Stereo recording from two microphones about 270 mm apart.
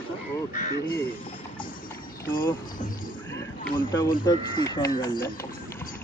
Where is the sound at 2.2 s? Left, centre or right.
Centre.